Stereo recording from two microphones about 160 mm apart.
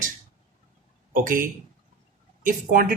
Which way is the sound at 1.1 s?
60° right (ahead or behind).